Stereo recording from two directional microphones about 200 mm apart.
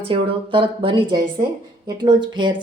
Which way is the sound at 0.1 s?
25° right (ahead or behind).